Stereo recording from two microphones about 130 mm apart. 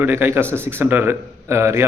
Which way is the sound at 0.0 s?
15° right (ahead or behind).